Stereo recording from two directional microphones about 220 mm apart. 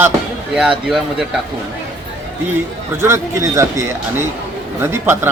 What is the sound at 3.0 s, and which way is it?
Speech, 10° right (ahead or behind).